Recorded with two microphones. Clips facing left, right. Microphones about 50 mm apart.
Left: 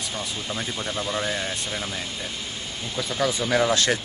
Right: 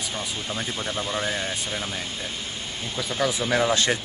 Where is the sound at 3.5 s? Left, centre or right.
Right.